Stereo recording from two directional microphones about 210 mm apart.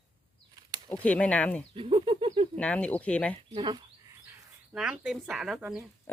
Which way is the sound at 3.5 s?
20° right (ahead or behind).